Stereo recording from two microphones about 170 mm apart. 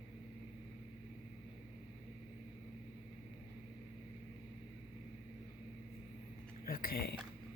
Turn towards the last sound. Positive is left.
turn(degrees=65)  # may be behind; listen again after turning